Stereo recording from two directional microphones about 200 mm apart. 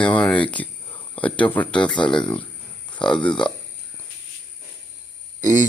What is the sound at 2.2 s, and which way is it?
Speech, 5° left (ahead or behind).